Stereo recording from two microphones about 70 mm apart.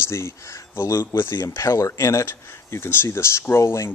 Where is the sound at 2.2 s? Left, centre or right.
Left.